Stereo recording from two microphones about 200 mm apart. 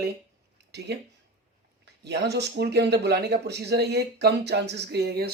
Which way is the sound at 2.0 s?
55° right (ahead or behind).